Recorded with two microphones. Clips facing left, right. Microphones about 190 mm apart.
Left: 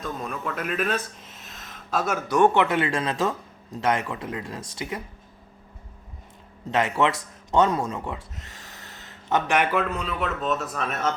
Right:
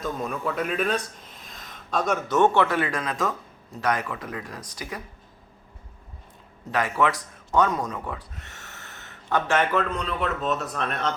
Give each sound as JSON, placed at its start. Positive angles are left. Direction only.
{"t": 0.0, "sound": "speech", "side_deg": 0}
{"t": 6.7, "sound": "speech", "side_deg": 25}
{"t": 8.4, "sound": "snort", "side_deg": -70}
{"t": 9.0, "sound": "a man's voice", "side_deg": 20}